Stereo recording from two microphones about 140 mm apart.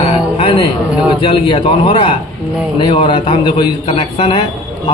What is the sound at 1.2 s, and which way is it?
A man's voice, 40° left (ahead or behind).